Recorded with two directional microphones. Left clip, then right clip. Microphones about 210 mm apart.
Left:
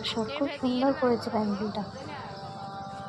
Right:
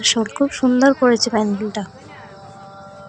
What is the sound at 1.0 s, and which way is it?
Speech, 40° right (ahead or behind).